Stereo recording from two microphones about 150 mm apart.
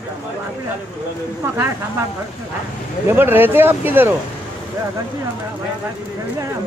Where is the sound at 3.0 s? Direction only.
15° right (ahead or behind).